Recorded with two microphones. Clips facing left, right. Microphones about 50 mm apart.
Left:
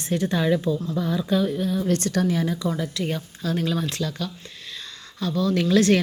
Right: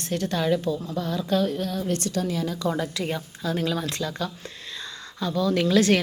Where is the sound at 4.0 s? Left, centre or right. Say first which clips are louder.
Left 1 dB; centre.